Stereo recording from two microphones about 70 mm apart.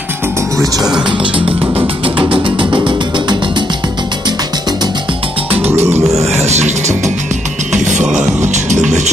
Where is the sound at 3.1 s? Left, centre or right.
Right.